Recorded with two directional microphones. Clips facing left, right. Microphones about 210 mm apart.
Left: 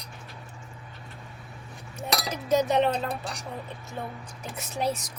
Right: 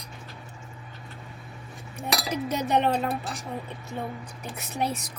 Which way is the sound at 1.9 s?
60° right (ahead or behind).